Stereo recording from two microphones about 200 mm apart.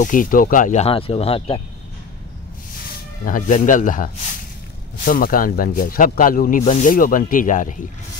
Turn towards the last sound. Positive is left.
turn(degrees=40)  # may be behind; listen again after turning